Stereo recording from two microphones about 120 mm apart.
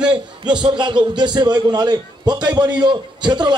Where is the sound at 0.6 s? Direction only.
40° right (ahead or behind).